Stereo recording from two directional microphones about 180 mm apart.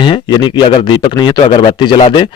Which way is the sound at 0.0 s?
25° left (ahead or behind).